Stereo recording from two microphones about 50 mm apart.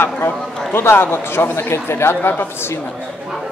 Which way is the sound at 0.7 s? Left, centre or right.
Left.